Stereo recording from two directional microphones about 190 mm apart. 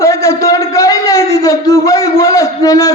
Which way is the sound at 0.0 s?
15° left (ahead or behind).